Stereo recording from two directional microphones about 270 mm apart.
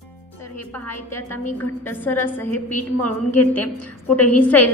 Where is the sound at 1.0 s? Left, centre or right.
Centre.